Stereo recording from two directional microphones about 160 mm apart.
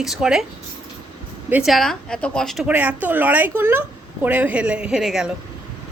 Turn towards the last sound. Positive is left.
turn(degrees=-5)  # may be behind; listen again after turning